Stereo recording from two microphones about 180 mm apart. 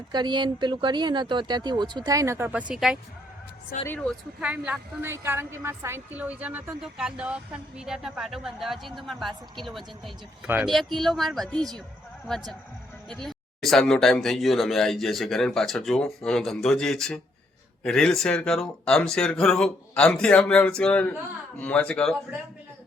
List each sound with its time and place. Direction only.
0.1 s speech: 25° right (ahead or behind); by 3.0 s 5° right (ahead or behind)
3.8 s speech: 5° left (ahead or behind)
4.4 s a woman's voice: 5° right (ahead or behind)
13.1 s a woman's voice: centre (ahead or behind)